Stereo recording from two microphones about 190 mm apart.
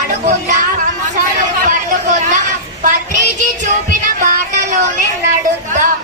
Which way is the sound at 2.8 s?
40° right (ahead or behind).